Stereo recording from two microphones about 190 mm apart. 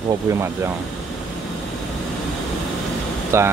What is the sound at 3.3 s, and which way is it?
Speech, 15° right (ahead or behind).